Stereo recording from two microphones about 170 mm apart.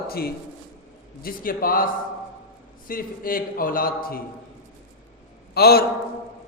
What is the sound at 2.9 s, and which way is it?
A man's voice, 55° left (ahead or behind).